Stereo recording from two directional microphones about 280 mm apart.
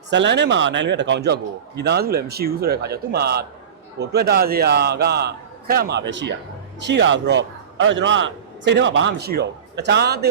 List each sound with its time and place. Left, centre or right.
0.1 s a man's voice: right